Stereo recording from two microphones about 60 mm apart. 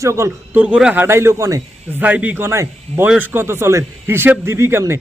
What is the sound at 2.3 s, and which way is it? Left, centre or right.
Speech, right.